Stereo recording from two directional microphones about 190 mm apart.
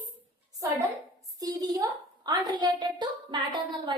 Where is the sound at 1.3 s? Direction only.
20° right (ahead or behind).